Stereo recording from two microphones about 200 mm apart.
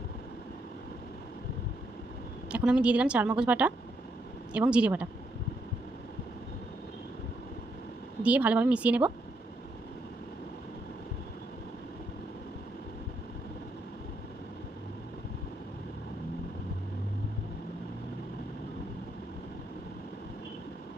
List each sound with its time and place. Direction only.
2.5 s a woman's voice: 5° right (ahead or behind)
8.2 s speech: 5° right (ahead or behind)